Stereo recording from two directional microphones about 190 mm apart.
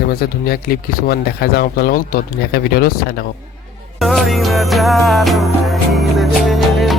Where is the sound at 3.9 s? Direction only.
Centre (ahead or behind).